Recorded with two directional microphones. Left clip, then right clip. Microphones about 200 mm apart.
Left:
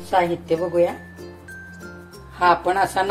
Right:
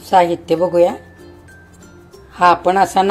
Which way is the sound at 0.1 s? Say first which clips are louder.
Right 7 dB; 45° right (ahead or behind).